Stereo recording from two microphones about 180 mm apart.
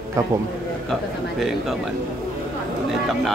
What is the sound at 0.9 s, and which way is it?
Speech, centre (ahead or behind).